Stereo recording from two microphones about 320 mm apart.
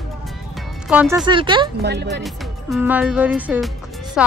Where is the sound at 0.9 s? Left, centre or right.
Centre.